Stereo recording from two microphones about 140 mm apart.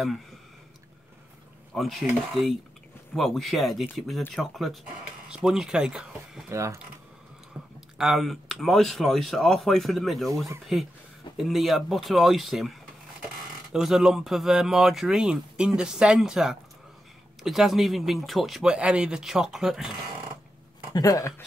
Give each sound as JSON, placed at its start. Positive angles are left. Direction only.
{"t": 1.7, "sound": "speech", "side_deg": 0}
{"t": 6.5, "sound": "speech", "side_deg": -20}
{"t": 7.5, "sound": "a sound", "side_deg": -15}
{"t": 8.0, "sound": "speech", "side_deg": 0}
{"t": 20.9, "sound": "speech", "side_deg": 25}